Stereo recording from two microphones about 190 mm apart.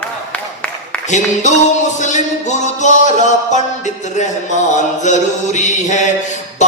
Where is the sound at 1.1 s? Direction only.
40° left (ahead or behind).